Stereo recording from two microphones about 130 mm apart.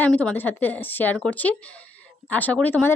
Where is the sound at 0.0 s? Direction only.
10° left (ahead or behind).